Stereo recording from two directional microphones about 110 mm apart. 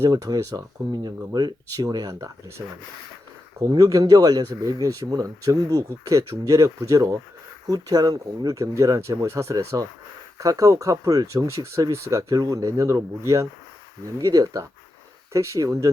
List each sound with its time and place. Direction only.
0.0 s speech: 35° right (ahead or behind)